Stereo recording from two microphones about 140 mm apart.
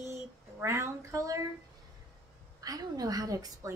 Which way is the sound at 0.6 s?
20° right (ahead or behind).